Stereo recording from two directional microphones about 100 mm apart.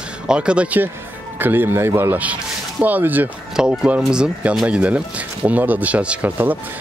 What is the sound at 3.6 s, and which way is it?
Speech, 5° right (ahead or behind).